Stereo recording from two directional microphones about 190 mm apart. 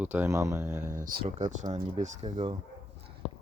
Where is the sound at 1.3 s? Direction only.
35° right (ahead or behind).